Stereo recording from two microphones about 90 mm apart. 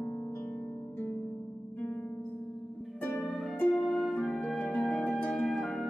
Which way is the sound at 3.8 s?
5° left (ahead or behind).